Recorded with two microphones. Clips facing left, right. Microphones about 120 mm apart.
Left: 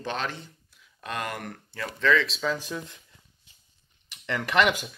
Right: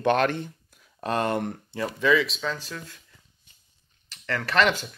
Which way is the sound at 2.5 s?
15° left (ahead or behind).